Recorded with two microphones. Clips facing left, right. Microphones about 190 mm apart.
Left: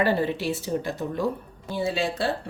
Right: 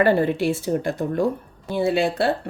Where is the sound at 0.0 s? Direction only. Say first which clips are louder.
Right 5 dB; 55° right (ahead or behind).